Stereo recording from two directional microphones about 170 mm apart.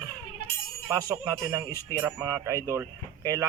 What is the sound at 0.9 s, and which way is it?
Speech, 20° right (ahead or behind).